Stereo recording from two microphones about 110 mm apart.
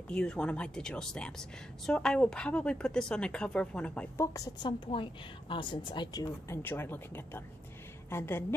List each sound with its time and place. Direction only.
0.1 s speech: 10° left (ahead or behind)
4.6 s a woman's voice: 45° left (ahead or behind)
6.6 s speech: 20° left (ahead or behind)